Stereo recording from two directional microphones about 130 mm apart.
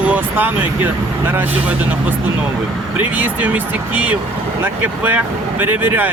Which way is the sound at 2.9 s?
15° right (ahead or behind).